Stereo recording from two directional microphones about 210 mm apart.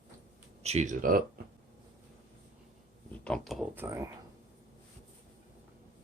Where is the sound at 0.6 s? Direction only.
30° right (ahead or behind).